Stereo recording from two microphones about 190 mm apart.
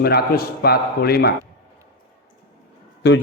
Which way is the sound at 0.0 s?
55° left (ahead or behind).